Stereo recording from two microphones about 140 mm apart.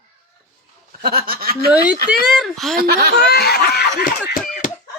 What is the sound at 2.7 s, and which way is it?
Speech, 90° right.